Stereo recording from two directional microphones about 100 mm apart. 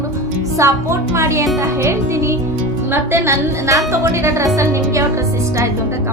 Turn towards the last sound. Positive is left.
turn(degrees=-30)  # may be behind; listen again after turning